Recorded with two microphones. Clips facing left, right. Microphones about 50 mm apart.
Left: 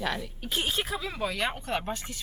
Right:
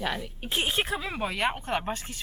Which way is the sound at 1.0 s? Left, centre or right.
Right.